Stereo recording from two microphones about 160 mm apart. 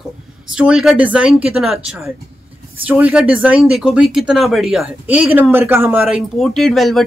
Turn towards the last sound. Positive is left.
turn(degrees=0)  # may be behind; listen again after turning